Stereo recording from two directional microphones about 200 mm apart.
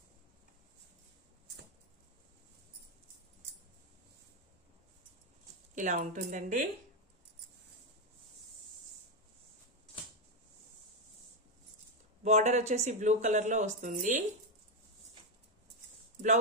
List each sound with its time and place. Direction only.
5.8 s speech: 40° right (ahead or behind)
12.2 s speech: 35° right (ahead or behind)